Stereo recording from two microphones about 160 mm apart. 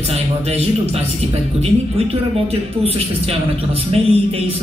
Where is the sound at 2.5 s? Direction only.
40° right (ahead or behind).